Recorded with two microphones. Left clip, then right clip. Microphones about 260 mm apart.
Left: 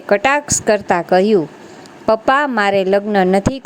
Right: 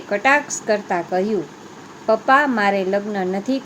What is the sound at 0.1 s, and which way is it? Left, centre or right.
A woman's voice, left.